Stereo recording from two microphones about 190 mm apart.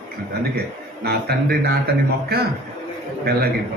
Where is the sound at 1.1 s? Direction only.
55° right (ahead or behind).